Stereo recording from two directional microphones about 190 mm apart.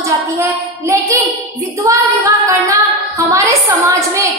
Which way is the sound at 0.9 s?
15° right (ahead or behind).